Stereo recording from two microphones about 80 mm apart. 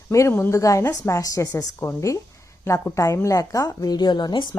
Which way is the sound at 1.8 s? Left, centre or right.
Left.